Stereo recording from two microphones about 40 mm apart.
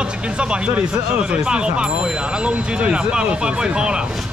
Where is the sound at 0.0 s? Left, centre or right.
Right.